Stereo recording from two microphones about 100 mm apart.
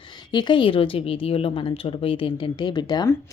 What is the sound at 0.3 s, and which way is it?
A woman's voice, 50° left (ahead or behind).